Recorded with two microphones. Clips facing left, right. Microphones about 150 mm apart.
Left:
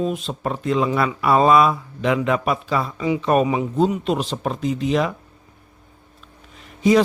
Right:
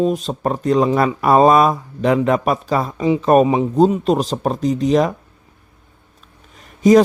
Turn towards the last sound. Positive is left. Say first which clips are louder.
# right 5 dB
turn(degrees=-45)  # may be behind; listen again after turning